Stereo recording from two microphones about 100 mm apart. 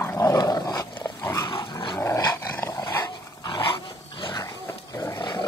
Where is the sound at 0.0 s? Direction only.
25° left (ahead or behind).